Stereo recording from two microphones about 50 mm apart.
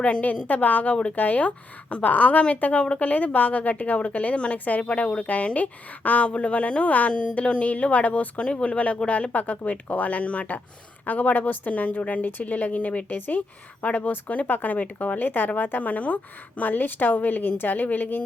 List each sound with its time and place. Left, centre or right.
0.0 s a woman's voice: left